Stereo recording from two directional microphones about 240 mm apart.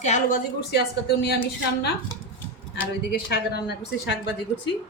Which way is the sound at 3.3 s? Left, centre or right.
Left.